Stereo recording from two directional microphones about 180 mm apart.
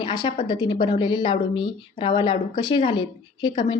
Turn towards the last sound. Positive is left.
turn(degrees=25)  # may be behind; listen again after turning